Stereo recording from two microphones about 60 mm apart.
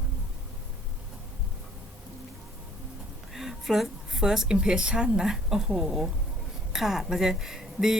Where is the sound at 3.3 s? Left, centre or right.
Centre.